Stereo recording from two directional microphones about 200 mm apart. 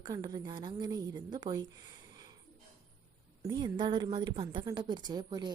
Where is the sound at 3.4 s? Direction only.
20° right (ahead or behind).